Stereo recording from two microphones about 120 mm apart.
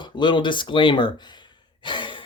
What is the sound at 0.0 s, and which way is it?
Speech, 40° left (ahead or behind).